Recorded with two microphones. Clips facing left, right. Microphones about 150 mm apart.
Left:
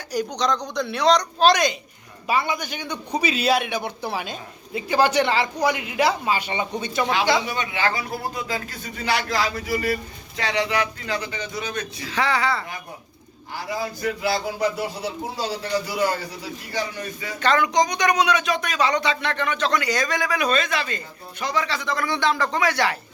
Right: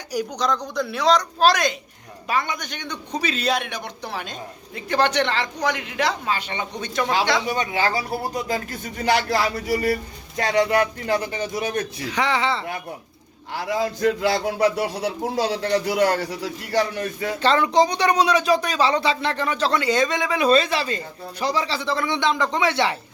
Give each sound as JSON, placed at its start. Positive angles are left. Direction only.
{"t": 0.1, "sound": "a man's voice", "side_deg": -5}
{"t": 7.4, "sound": "speech", "side_deg": -40}
{"t": 9.6, "sound": "speech", "side_deg": -30}
{"t": 10.3, "sound": "a man's voice", "side_deg": -45}
{"t": 12.0, "sound": "speech", "side_deg": -20}
{"t": 13.5, "sound": "a man's voice", "side_deg": -65}
{"t": 17.4, "sound": "speech", "side_deg": -30}